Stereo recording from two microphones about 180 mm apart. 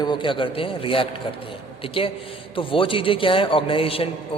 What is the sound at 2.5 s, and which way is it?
A man's voice, 30° left (ahead or behind).